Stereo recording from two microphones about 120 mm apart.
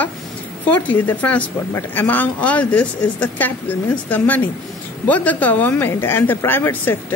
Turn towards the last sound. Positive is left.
turn(degrees=15)  # may be behind; listen again after turning